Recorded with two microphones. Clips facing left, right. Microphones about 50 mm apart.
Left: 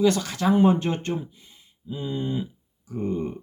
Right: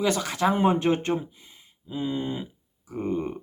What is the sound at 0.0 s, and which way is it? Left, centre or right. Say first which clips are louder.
Speech: left 2 dB; right.